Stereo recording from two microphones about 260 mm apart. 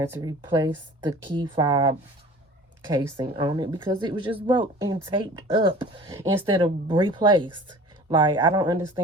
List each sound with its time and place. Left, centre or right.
0.0 s speech: centre